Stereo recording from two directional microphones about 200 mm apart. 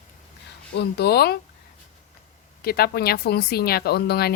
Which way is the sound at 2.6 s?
50° left (ahead or behind).